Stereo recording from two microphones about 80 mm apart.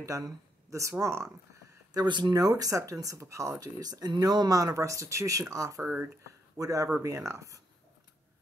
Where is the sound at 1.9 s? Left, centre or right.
Right.